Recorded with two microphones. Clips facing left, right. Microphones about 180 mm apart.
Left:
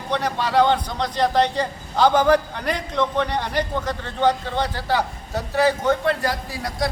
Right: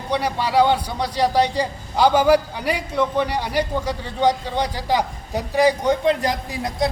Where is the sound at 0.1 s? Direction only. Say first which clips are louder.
Right 1 dB; 10° right (ahead or behind).